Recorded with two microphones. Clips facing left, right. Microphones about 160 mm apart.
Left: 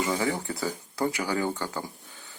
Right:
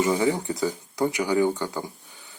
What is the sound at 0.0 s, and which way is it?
Speech, 20° right (ahead or behind).